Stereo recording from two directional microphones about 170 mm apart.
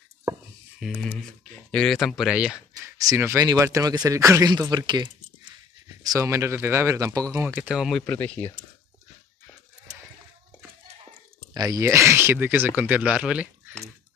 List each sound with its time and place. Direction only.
0.7 s speech: centre (ahead or behind)
3.1 s speech: 15° right (ahead or behind)
8.1 s speech: 10° left (ahead or behind)
11.5 s speech: 20° right (ahead or behind)